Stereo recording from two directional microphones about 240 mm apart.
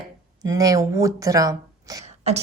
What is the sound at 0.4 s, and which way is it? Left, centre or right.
Speech, centre.